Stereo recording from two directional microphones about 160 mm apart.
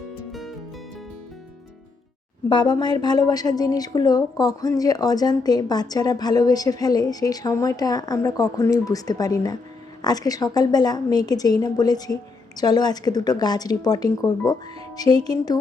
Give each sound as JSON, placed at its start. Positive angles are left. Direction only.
{"t": 0.3, "sound": "music", "side_deg": 0}
{"t": 2.5, "sound": "a woman's voice", "side_deg": 30}